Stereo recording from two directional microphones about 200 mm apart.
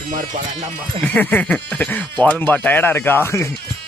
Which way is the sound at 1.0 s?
5° left (ahead or behind).